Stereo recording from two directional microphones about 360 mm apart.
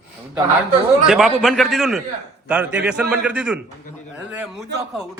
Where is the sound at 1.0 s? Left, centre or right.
Centre.